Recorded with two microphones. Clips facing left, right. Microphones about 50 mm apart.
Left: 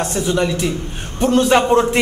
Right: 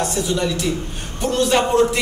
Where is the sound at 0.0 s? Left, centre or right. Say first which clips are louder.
Left 3 dB; left.